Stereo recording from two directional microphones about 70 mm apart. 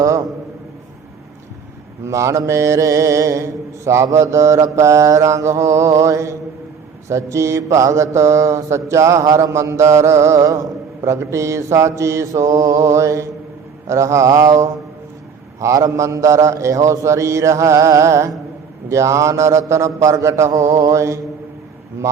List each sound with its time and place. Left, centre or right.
2.0 s mantra: right